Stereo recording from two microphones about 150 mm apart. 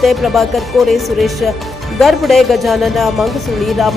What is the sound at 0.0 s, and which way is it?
A woman's voice, centre (ahead or behind).